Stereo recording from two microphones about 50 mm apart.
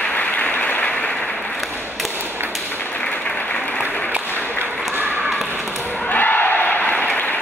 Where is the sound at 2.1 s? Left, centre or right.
Right.